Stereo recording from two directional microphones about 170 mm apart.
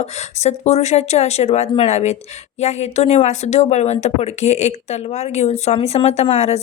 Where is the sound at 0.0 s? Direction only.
40° left (ahead or behind).